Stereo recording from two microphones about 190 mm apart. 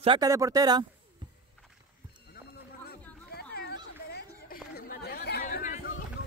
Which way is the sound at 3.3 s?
55° left (ahead or behind).